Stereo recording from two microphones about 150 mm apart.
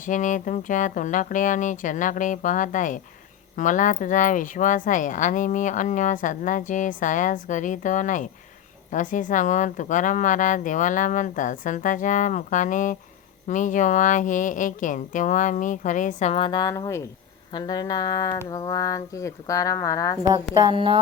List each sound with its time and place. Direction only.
0.0 s speech: 60° left (ahead or behind); by 20.1 s 20° left (ahead or behind)
20.2 s a woman's voice: 25° right (ahead or behind)